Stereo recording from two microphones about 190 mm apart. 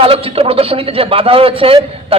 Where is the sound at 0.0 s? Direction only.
30° right (ahead or behind).